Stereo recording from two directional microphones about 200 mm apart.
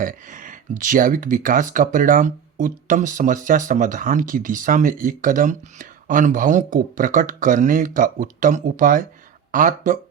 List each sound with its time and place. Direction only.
0.0 s speech: 40° right (ahead or behind)